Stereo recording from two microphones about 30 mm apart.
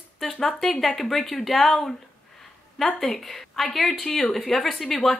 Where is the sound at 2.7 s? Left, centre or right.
Centre.